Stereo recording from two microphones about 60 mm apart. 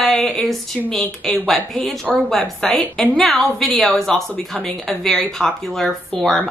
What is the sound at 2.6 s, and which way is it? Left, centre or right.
A woman's voice, centre.